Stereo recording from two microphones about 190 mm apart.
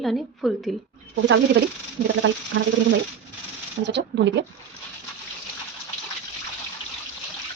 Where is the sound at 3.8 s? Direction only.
65° right (ahead or behind).